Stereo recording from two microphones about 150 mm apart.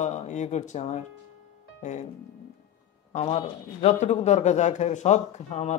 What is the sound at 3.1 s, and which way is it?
Speech, 40° left (ahead or behind).